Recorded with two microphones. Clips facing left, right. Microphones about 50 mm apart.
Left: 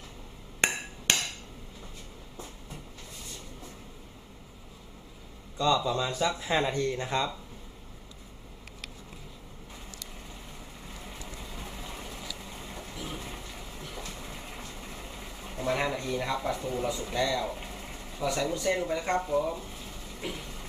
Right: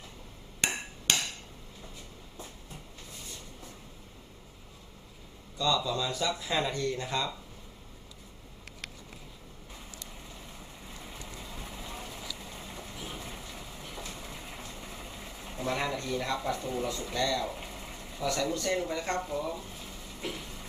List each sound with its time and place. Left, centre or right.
0.6 s hammer: left
5.5 s speech: left
11.7 s vehicle: centre
13.9 s train: centre
15.6 s speech: centre